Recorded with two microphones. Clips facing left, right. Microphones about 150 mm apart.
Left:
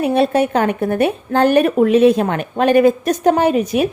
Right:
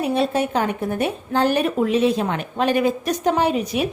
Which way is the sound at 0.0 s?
60° left (ahead or behind).